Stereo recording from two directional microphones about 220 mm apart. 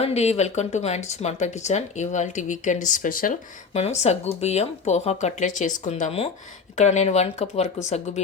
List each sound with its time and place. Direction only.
0.0 s speech: 30° left (ahead or behind)